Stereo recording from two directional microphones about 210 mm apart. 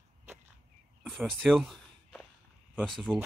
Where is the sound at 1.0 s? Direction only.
Centre (ahead or behind).